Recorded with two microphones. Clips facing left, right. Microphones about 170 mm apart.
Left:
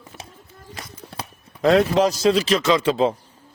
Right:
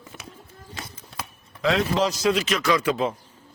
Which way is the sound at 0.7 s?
30° right (ahead or behind).